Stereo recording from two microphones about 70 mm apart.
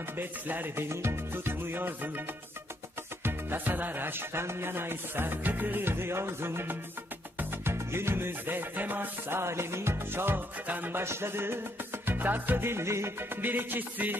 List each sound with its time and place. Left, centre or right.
0.2 s music: right
3.3 s music: right
9.4 s music: right
13.4 s music: right